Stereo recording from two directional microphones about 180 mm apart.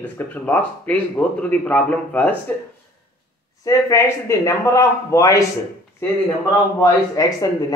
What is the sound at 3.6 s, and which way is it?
Speech, 15° left (ahead or behind).